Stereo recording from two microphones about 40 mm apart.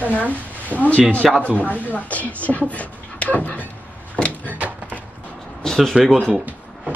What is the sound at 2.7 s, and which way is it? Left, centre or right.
Beatboxing, left.